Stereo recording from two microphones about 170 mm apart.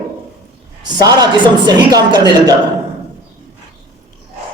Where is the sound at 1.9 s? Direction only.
25° right (ahead or behind).